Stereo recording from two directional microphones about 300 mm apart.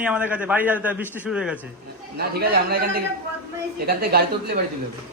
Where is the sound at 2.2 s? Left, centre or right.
Right.